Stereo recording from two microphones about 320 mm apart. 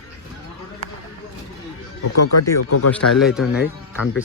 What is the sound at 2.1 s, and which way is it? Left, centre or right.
Speech, left.